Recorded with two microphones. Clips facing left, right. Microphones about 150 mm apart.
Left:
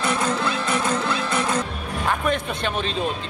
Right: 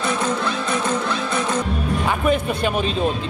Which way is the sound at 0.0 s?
Centre (ahead or behind).